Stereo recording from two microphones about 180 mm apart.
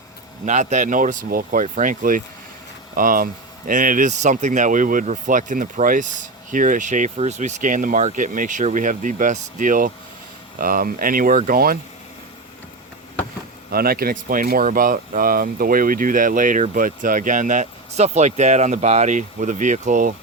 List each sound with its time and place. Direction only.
0.4 s speech: 40° right (ahead or behind)
13.7 s speech: 55° right (ahead or behind)